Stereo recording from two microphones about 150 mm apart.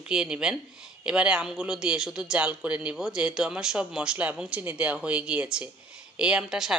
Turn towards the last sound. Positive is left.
turn(degrees=-5)  # may be behind; listen again after turning